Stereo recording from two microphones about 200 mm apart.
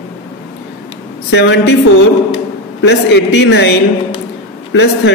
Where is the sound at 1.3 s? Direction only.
60° left (ahead or behind).